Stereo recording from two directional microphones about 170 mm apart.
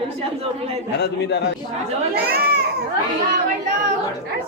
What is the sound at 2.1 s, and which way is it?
Speech, 70° right (ahead or behind).